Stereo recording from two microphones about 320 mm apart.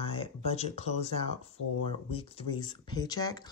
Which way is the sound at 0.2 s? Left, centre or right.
Centre.